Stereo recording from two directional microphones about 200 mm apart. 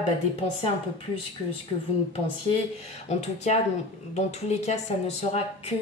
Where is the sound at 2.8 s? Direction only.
35° left (ahead or behind).